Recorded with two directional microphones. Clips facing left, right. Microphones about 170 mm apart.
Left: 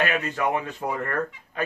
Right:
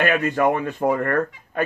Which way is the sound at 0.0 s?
55° right (ahead or behind).